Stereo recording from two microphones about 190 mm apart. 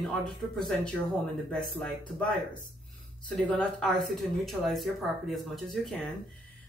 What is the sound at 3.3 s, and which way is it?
Speech, 5° left (ahead or behind).